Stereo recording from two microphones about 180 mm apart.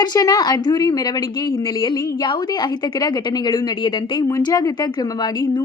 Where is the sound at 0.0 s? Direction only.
20° left (ahead or behind).